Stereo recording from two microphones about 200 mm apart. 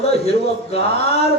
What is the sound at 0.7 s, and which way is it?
Speech, 30° left (ahead or behind).